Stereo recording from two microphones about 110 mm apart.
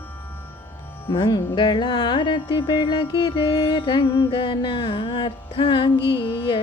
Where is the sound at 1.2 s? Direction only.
40° left (ahead or behind).